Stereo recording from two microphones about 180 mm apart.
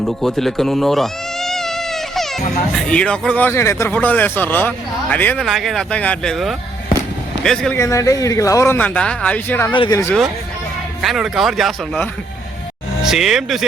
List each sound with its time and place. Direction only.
0.0 s cat: centre (ahead or behind)
2.7 s a man's voice: 5° left (ahead or behind)
7.8 s a man's voice: 15° left (ahead or behind)
9.7 s speech: 25° left (ahead or behind)
11.0 s speech: centre (ahead or behind)